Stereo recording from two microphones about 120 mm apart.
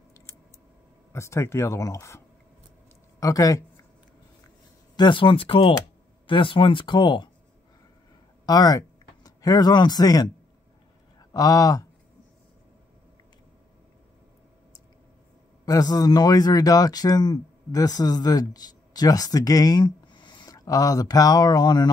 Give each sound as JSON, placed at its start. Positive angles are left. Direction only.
{"t": 1.1, "sound": "speech", "side_deg": 25}
{"t": 4.9, "sound": "speech", "side_deg": 40}
{"t": 8.5, "sound": "speech", "side_deg": 30}
{"t": 15.6, "sound": "speech", "side_deg": 30}